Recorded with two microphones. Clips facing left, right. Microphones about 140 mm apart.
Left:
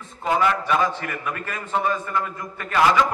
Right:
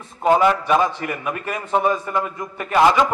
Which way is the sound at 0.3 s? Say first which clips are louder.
Right 5 dB; 30° right (ahead or behind).